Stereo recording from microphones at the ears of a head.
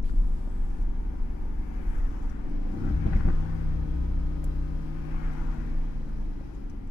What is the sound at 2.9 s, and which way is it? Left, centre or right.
Vehicle, left.